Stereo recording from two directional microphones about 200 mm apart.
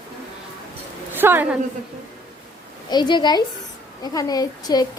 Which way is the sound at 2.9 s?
20° left (ahead or behind).